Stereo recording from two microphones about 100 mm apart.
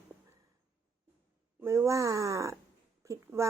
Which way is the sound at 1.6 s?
30° right (ahead or behind).